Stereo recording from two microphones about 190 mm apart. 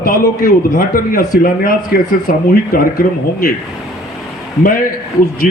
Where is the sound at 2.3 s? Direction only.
50° left (ahead or behind).